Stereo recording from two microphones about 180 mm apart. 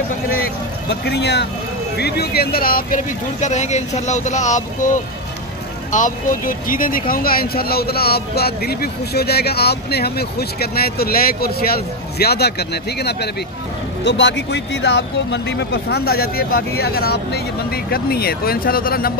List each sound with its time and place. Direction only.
0.8 s speech: 70° left (ahead or behind); by 4.6 s 40° left (ahead or behind)
5.9 s speech: 45° left (ahead or behind); by 13.3 s 65° left (ahead or behind)
14.0 s speech: 80° left; by 19.1 s 55° left (ahead or behind)